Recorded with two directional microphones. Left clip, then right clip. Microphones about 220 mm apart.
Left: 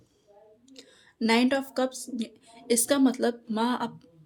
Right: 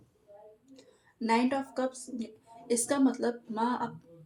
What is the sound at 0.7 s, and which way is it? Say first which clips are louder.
A woman's voice: left 6 dB; 40° left (ahead or behind).